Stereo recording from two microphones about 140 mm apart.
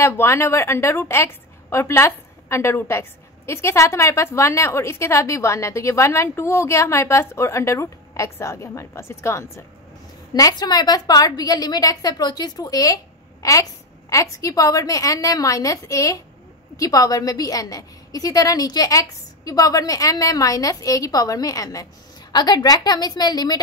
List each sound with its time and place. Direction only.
0.0 s a woman's voice: 20° left (ahead or behind)